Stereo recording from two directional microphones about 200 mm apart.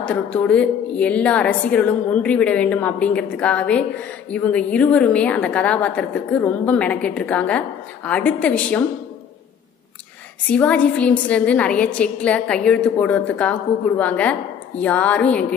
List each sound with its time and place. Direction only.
0.0 s a woman's voice: 5° left (ahead or behind)
10.5 s a woman's voice: 5° left (ahead or behind)